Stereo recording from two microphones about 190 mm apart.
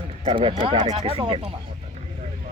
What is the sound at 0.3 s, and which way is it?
Speech, 25° right (ahead or behind).